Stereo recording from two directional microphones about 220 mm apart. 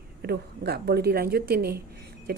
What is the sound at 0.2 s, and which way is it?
Speech, 45° right (ahead or behind).